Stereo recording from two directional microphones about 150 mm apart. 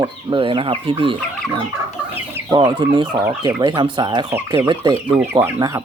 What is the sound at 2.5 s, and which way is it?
Speech, 30° right (ahead or behind).